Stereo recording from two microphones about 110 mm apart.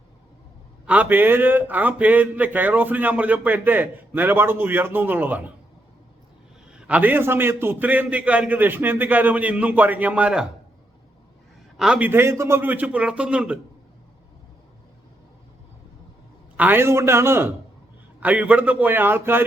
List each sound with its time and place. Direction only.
0.9 s a man's voice: 15° right (ahead or behind)
6.7 s a man's voice: 10° right (ahead or behind)
11.8 s a man's voice: 5° right (ahead or behind)
12.0 s a man's voice: 20° right (ahead or behind)
16.6 s a man's voice: 20° right (ahead or behind)
18.2 s a man's voice: 10° right (ahead or behind)